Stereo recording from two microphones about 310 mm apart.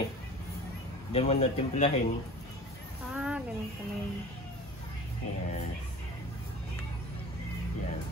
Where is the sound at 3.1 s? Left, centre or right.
Centre.